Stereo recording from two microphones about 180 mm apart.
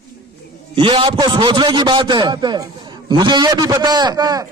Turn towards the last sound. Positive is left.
turn(degrees=-20)  # may be behind; listen again after turning